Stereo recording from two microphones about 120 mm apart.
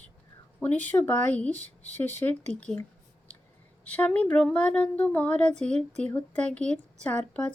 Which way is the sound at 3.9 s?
10° left (ahead or behind).